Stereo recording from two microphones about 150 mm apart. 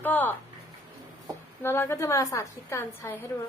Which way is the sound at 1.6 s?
15° left (ahead or behind).